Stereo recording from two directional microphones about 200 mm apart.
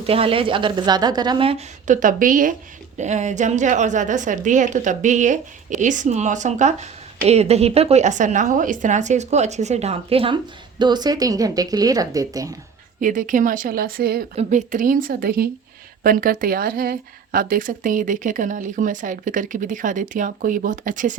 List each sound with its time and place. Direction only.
0.0 s a woman's voice: 30° right (ahead or behind)
13.0 s a woman's voice: 40° right (ahead or behind)